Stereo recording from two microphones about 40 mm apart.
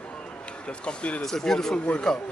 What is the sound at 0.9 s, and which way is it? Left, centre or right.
Speech, left.